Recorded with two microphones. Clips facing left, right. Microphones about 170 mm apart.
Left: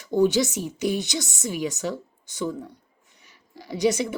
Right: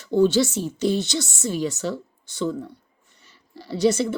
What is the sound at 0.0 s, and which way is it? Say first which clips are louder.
Speech: right 2 dB; 15° left (ahead or behind).